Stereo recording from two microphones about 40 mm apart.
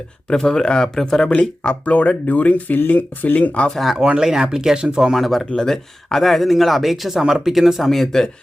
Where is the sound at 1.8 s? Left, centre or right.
Left.